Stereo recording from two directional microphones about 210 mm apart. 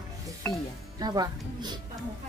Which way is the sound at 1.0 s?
20° right (ahead or behind).